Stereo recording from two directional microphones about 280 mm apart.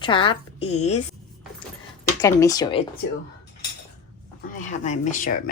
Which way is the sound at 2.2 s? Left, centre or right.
Centre.